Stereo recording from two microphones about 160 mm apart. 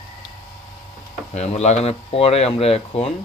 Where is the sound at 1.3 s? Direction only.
45° left (ahead or behind).